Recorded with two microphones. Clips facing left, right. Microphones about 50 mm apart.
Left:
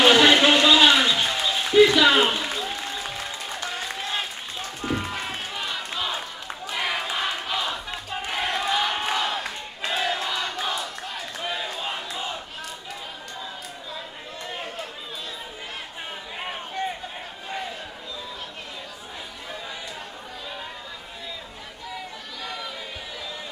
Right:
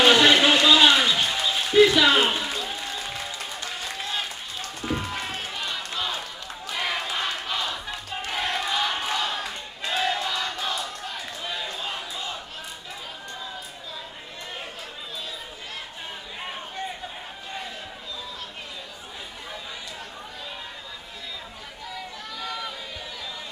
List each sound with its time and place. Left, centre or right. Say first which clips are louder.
0.0 s a sound: left 1 dB; centre
2.0 s speech: left 1 dB; centre
2.4 s applause: left 1 dB; left
4.8 s run: left 1 dB; centre
6.1 s run: left 2 dB; left
6.7 s battle cry: left 1 dB; centre
9.1 s crowd: left 2 dB; centre
9.8 s battle cry: even; centre
11.4 s crowd: left 3 dB; centre